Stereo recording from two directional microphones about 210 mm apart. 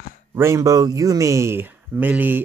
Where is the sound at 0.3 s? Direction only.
10° right (ahead or behind).